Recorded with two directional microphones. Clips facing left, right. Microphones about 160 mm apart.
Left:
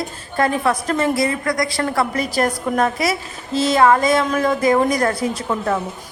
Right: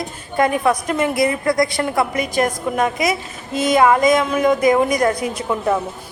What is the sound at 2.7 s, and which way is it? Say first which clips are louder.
A woman's voice: even; 15° right (ahead or behind).